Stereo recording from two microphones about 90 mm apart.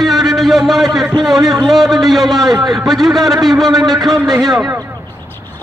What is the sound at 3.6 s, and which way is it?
Speech, 45° right (ahead or behind).